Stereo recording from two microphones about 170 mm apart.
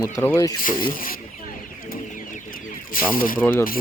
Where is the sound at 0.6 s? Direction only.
55° left (ahead or behind).